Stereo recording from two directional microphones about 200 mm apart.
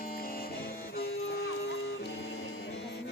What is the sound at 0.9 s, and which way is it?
Music, 55° left (ahead or behind).